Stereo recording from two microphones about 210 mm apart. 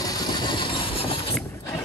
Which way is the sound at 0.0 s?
20° left (ahead or behind).